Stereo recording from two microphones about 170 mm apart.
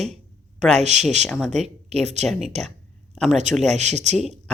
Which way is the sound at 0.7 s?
40° right (ahead or behind).